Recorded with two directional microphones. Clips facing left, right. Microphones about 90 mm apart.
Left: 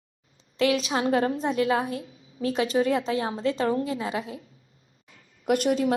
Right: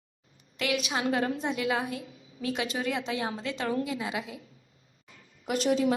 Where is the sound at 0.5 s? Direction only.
30° left (ahead or behind).